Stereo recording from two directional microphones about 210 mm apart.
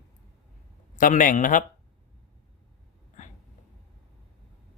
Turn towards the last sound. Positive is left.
turn(degrees=35)  # may be behind; listen again after turning